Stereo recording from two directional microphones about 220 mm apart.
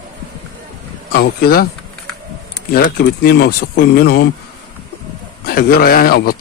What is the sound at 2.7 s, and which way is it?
A man's voice, 45° left (ahead or behind).